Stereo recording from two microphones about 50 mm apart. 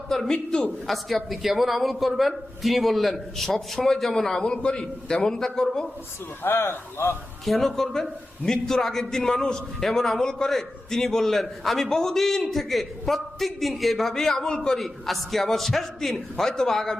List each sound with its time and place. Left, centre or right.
0.1 s a woman's voice: centre
6.4 s speech: left
7.4 s a woman's voice: centre